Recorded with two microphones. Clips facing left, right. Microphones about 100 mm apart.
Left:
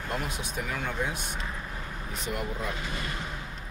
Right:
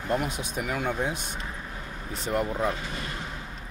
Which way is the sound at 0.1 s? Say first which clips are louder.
Right 6 dB; 20° right (ahead or behind).